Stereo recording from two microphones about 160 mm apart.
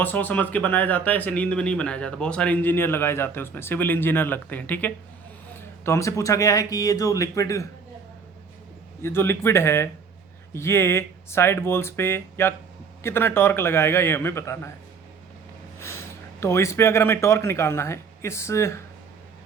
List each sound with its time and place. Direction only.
0.0 s speech: 10° left (ahead or behind)
9.0 s speech: 15° left (ahead or behind)
15.8 s speech: 15° left (ahead or behind)